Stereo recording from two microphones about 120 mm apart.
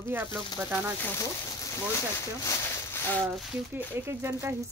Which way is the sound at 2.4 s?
25° left (ahead or behind).